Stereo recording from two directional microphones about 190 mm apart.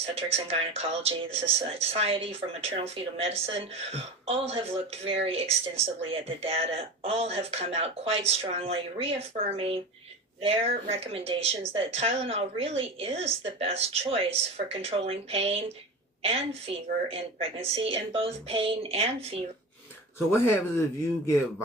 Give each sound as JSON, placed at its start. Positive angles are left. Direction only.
{"t": 0.0, "sound": "speech", "side_deg": -30}
{"t": 20.3, "sound": "speech", "side_deg": 15}